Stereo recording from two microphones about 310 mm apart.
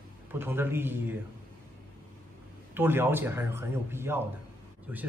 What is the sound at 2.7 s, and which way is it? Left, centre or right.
A man's voice, centre.